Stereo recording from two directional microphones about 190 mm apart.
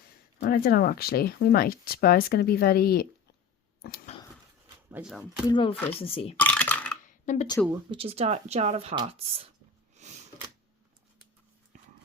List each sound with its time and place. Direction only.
0.3 s speech: 50° left (ahead or behind)
3.8 s a sound: 55° left (ahead or behind)
4.9 s speech: 10° right (ahead or behind)
5.5 s speech: 25° left (ahead or behind)
5.7 s speech: 10° left (ahead or behind)
6.0 s speech: 30° left (ahead or behind)
6.4 s coin: 10° left (ahead or behind)
7.0 s a sound: 40° left (ahead or behind)
7.7 s speech: 25° right (ahead or behind)
9.9 s sniff: 35° right (ahead or behind)